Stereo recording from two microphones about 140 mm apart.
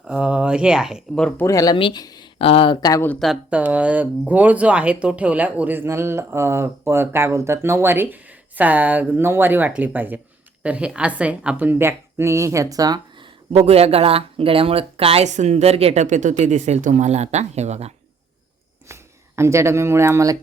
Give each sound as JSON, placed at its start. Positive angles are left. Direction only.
{"t": 0.1, "sound": "speech", "side_deg": -10}
{"t": 1.5, "sound": "speech", "side_deg": 25}
{"t": 1.7, "sound": "speech", "side_deg": 35}
{"t": 2.4, "sound": "speech", "side_deg": 40}
{"t": 2.8, "sound": "speech", "side_deg": 25}
{"t": 3.1, "sound": "speech", "side_deg": 0}
{"t": 3.5, "sound": "a woman's voice", "side_deg": -10}
{"t": 18.9, "sound": "a sound", "side_deg": -20}
{"t": 19.4, "sound": "speech", "side_deg": -20}